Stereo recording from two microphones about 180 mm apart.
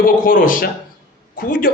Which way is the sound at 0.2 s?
50° left (ahead or behind).